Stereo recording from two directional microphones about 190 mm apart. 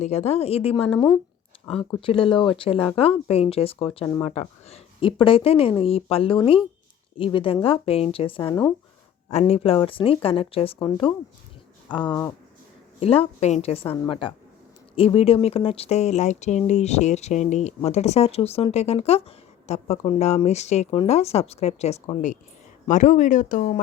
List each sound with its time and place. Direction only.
0.0 s speech: 35° left (ahead or behind)
9.3 s speech: 30° left (ahead or behind)